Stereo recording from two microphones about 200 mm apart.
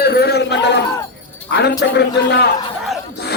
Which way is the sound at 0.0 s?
50° left (ahead or behind).